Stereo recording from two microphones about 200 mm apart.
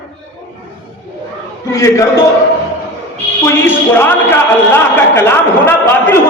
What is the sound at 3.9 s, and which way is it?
A man's voice, 10° left (ahead or behind).